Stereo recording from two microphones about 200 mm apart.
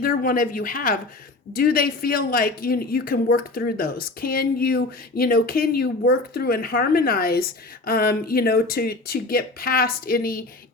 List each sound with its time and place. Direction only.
0.0 s speech: 45° left (ahead or behind)